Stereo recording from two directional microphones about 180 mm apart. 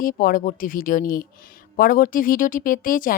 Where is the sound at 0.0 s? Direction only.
50° left (ahead or behind).